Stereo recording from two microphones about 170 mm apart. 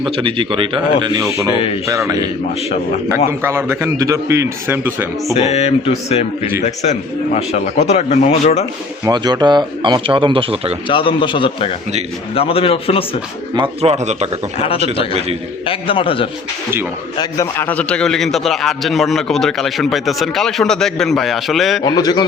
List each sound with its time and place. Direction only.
0.0 s a man's voice: 30° right (ahead or behind); by 5.0 s 10° right (ahead or behind)
5.3 s a man's voice: 40° left (ahead or behind)
9.0 s a man's voice: 25° right (ahead or behind)
10.8 s a man's voice: 30° left (ahead or behind)
13.6 s a man's voice: 40° right (ahead or behind)
15.6 s a man's voice: 30° left (ahead or behind)
17.2 s a man's voice: 15° left (ahead or behind); by 21.8 s centre (ahead or behind)
21.8 s a man's voice: 25° left (ahead or behind)